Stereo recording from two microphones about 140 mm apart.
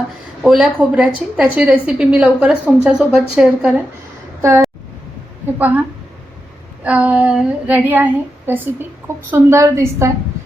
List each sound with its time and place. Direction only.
0.4 s a woman's voice: 5° right (ahead or behind)
4.4 s a woman's voice: 20° right (ahead or behind)
6.8 s a woman's voice: 10° right (ahead or behind)